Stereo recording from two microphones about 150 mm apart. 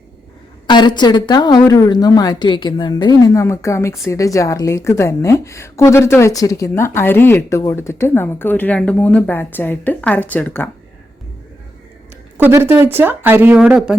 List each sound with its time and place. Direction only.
0.7 s a woman's voice: 30° left (ahead or behind); by 10.7 s 10° left (ahead or behind)
12.4 s speech: 15° right (ahead or behind)